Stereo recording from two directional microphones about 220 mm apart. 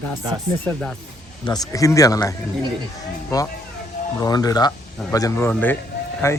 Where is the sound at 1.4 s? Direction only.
15° left (ahead or behind).